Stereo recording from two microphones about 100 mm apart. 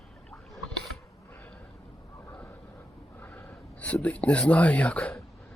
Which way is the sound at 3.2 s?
15° left (ahead or behind).